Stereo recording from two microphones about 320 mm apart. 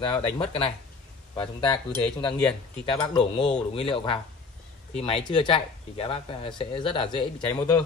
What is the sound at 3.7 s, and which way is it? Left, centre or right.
Speech, centre.